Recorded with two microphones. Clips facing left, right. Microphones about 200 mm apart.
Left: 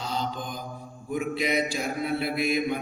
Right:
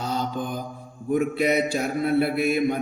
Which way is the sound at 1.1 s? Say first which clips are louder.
Right 5 dB; 45° right (ahead or behind).